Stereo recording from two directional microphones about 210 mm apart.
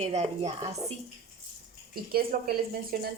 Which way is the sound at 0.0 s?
30° right (ahead or behind).